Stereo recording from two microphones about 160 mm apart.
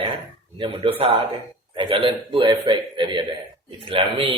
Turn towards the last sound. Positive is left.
turn(degrees=-30)  # may be behind; listen again after turning